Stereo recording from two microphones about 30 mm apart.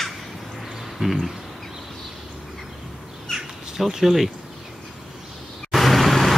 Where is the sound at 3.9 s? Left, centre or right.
Centre.